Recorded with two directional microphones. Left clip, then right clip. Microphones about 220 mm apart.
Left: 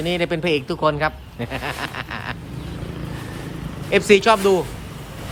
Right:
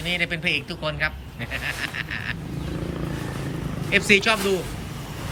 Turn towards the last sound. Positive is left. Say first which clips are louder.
# left 5 dB
turn(degrees=15)  # may be behind; listen again after turning